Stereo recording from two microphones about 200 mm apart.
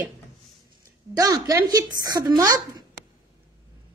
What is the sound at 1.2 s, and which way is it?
A woman's voice, 15° right (ahead or behind).